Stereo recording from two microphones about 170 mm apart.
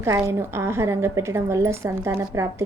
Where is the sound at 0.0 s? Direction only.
20° right (ahead or behind).